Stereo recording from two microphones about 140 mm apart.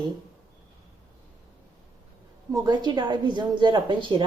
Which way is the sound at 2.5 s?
30° right (ahead or behind).